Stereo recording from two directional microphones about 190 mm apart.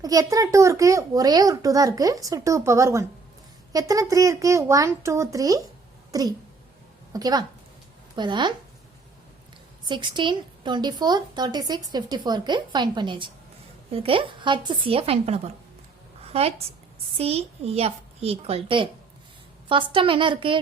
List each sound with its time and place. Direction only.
0.0 s a child's voice: 20° right (ahead or behind)
9.8 s a woman's voice: 25° right (ahead or behind)